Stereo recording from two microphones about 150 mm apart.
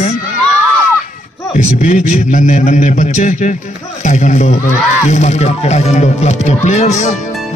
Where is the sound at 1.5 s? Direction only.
50° left (ahead or behind).